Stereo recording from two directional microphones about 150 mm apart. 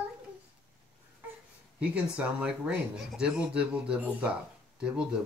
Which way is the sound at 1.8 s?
10° right (ahead or behind).